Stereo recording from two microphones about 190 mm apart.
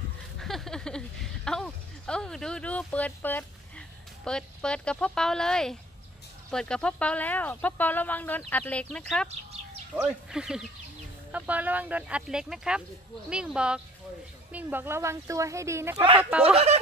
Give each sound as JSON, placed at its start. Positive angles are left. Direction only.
{"t": 0.4, "sound": "a sound", "side_deg": 0}
{"t": 6.5, "sound": "speech", "side_deg": 5}
{"t": 16.5, "sound": "speech", "side_deg": -35}